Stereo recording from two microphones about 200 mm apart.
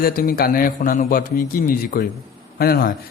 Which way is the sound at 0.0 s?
45° left (ahead or behind).